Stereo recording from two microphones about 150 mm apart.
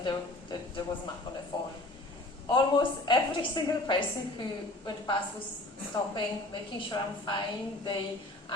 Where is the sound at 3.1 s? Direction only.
30° left (ahead or behind).